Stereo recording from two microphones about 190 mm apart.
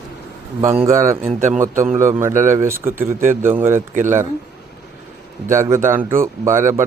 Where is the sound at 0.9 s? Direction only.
15° right (ahead or behind).